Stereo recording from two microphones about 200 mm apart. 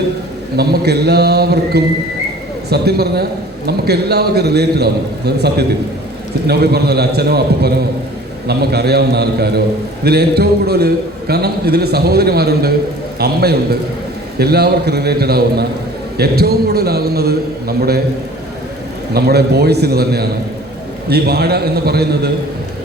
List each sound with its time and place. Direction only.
0.5 s a man's voice: 55° right (ahead or behind)
19.1 s a man's voice: 55° right (ahead or behind)